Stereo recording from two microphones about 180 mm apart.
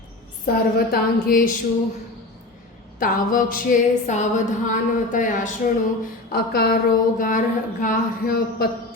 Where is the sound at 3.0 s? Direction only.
50° left (ahead or behind).